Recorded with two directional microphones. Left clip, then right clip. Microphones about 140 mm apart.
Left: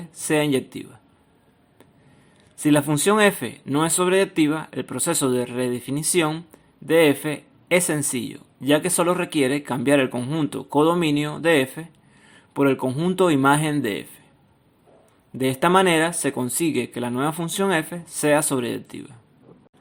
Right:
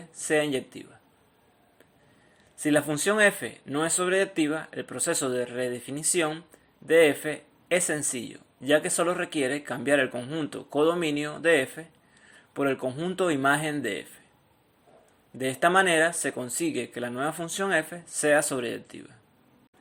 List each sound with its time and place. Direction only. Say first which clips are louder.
0.2 s speech: left 4 dB; 35° left (ahead or behind)
2.6 s speech: left 5 dB; 30° left (ahead or behind)
15.4 s speech: left 4 dB; 30° left (ahead or behind)